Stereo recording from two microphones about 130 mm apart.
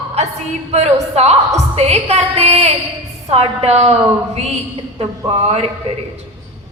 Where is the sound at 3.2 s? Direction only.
55° right (ahead or behind).